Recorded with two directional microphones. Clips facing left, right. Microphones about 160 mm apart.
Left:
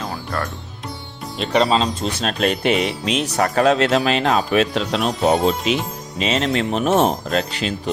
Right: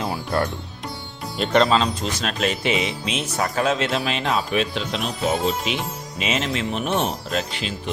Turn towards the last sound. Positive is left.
turn(degrees=40)  # may be behind; listen again after turning